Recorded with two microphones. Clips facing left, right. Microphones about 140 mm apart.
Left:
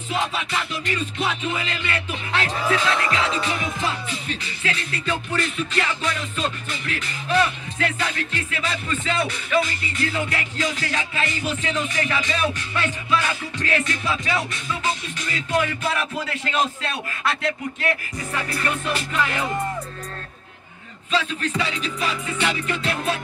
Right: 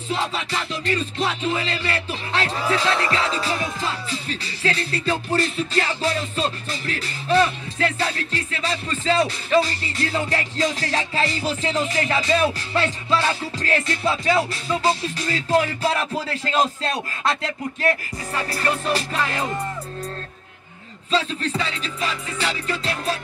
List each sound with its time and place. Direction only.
0.1 s music: 35° right (ahead or behind)
21.1 s music: 35° right (ahead or behind)